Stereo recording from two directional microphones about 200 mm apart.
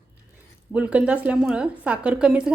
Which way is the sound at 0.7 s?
5° right (ahead or behind).